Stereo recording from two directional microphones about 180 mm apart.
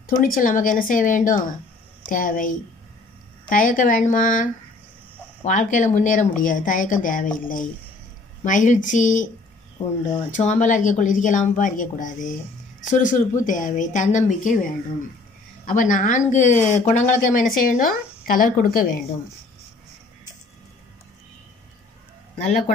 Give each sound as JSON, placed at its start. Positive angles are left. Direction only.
{"t": 0.0, "sound": "speech", "side_deg": 50}
{"t": 10.3, "sound": "speech", "side_deg": 45}